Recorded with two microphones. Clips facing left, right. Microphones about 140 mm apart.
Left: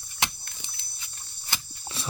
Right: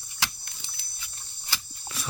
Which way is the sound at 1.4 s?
25° left (ahead or behind).